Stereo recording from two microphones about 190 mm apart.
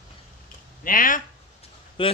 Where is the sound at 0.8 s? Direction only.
45° left (ahead or behind).